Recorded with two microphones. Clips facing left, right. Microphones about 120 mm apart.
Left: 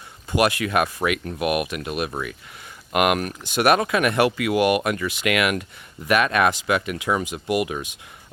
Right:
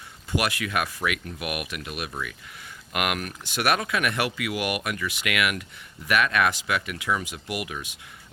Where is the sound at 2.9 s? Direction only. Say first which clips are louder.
Left 8 dB; 25° left (ahead or behind).